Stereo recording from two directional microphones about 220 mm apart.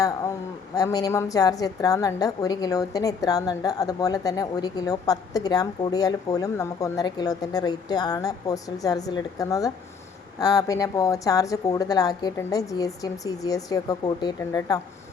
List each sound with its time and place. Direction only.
0.8 s a woman's voice: 15° left (ahead or behind)